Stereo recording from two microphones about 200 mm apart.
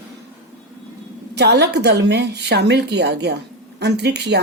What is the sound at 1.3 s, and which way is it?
A woman's voice, 55° right (ahead or behind).